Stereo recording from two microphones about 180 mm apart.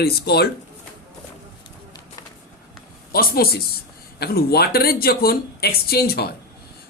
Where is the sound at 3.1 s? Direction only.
55° left (ahead or behind).